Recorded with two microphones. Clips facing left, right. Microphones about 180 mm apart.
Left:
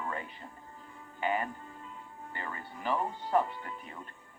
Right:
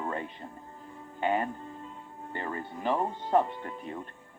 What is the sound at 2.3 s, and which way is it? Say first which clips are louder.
Speech: right 7 dB; 45° right (ahead or behind).